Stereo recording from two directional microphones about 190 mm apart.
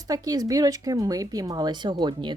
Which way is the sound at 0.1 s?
20° right (ahead or behind).